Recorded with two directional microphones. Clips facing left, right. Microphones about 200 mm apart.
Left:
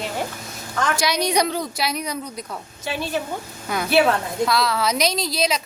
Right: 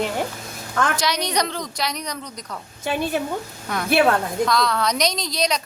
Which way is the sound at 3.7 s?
5° left (ahead or behind).